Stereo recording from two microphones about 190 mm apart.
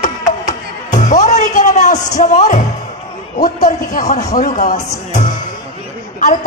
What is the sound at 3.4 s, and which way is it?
A man's voice, 45° left (ahead or behind).